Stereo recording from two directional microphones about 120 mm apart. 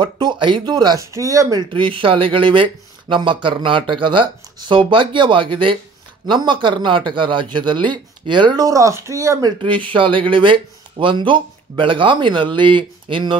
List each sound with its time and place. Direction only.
0.0 s speech: 40° right (ahead or behind)
1.1 s speech: 25° right (ahead or behind)
1.6 s speech: 45° right (ahead or behind); by 9.5 s 25° right (ahead or behind)
9.6 s speech: 45° right (ahead or behind)